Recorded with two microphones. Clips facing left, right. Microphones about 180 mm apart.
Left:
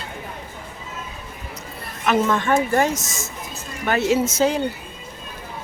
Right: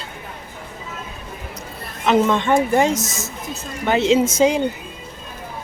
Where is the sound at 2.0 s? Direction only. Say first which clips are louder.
Right 3 dB; 20° right (ahead or behind).